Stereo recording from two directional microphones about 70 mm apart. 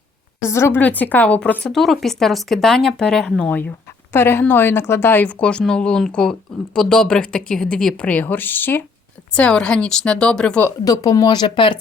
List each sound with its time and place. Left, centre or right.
0.4 s a woman's voice: left
0.8 s speech: left
1.6 s speech: centre
4.1 s speech: left; by 8.0 s centre
8.0 s speech: left
9.3 s speech: centre
10.8 s speech: left